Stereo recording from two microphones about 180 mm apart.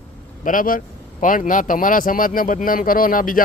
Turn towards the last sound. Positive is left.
turn(degrees=50)  # may be behind; listen again after turning